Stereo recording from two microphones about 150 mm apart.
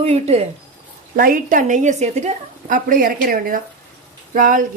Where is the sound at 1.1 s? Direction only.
70° right (ahead or behind).